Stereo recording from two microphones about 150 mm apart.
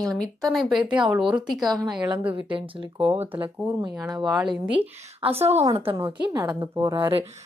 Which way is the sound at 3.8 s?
25° right (ahead or behind).